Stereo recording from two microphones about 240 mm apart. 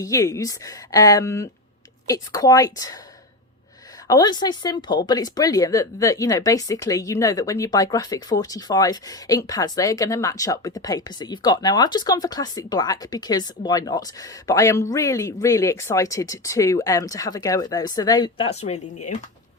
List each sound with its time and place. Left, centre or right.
0.0 s speech: centre
4.1 s speech: centre